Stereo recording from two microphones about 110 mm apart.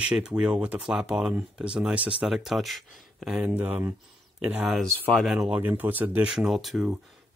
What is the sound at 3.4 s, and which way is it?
Speech, 15° right (ahead or behind).